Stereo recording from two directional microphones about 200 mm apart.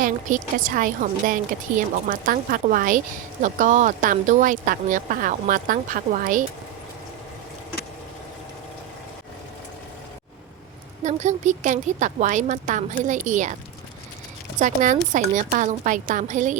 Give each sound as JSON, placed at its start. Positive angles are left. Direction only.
{"t": 0.0, "sound": "speech", "side_deg": -40}
{"t": 11.0, "sound": "speech", "side_deg": -35}
{"t": 14.6, "sound": "speech", "side_deg": -40}